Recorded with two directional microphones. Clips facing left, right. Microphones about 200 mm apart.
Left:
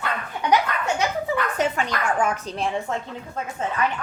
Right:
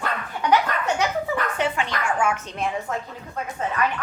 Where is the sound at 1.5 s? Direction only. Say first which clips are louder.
Left 1 dB; 40° left (ahead or behind).